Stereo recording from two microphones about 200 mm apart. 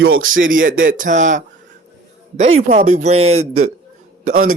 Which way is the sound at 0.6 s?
45° right (ahead or behind).